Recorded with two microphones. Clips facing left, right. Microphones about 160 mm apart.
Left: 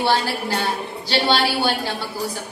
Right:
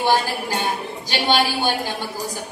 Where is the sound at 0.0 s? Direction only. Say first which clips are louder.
Right 1 dB; 20° right (ahead or behind).